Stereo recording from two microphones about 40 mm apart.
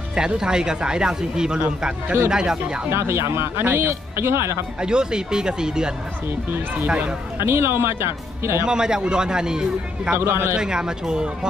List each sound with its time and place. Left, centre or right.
0.1 s speech: centre
2.9 s speech: right
3.6 s speech: right
4.8 s speech: centre
7.3 s speech: right
8.6 s speech: centre
10.1 s speech: right
10.6 s speech: centre